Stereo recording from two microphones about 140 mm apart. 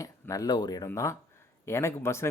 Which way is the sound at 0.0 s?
25° left (ahead or behind).